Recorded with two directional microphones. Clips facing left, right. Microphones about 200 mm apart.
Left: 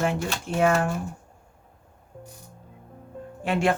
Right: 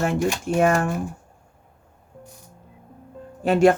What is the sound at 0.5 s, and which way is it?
Speech, 50° right (ahead or behind).